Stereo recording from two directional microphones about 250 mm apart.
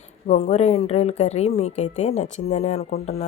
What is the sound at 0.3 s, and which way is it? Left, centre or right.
A woman's voice, left.